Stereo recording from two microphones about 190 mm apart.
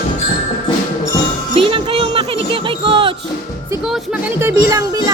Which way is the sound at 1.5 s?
30° right (ahead or behind).